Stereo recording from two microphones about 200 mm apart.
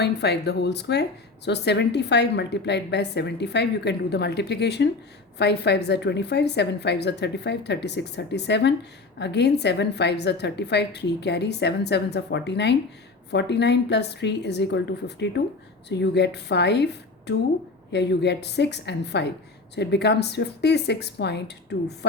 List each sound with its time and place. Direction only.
0.0 s a woman's voice: 55° left (ahead or behind)